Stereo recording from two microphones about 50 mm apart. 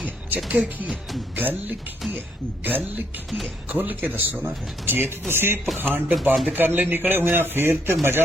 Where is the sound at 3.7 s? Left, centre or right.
Right.